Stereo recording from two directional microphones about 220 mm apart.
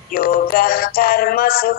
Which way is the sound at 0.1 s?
40° left (ahead or behind).